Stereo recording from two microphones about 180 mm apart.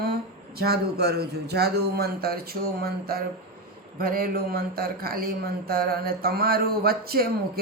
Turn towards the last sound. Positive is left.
turn(degrees=-60)  # may be behind; listen again after turning